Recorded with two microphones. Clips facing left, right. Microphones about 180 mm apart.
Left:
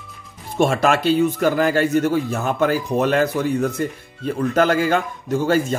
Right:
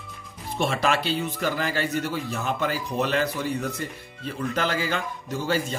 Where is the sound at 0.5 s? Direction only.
45° left (ahead or behind).